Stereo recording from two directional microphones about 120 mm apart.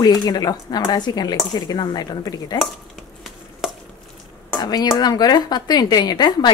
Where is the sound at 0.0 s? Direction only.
35° left (ahead or behind).